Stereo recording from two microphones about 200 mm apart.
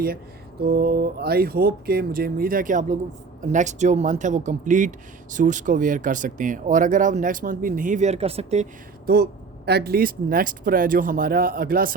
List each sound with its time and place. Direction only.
0.6 s speech: 50° right (ahead or behind); by 8.6 s 30° right (ahead or behind)
9.0 s speech: 55° right (ahead or behind)